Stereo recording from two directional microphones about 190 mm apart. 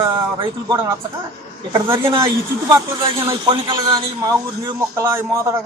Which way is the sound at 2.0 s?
25° right (ahead or behind).